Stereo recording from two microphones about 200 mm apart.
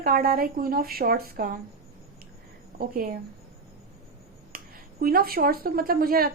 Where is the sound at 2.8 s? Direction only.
45° right (ahead or behind).